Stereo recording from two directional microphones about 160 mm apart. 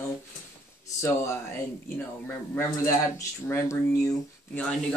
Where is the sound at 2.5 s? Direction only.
15° left (ahead or behind).